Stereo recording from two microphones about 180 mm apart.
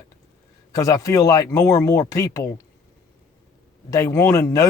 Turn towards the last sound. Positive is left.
turn(degrees=20)  # may be behind; listen again after turning